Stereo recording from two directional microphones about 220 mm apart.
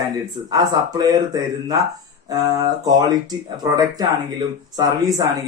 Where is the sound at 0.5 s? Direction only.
15° right (ahead or behind).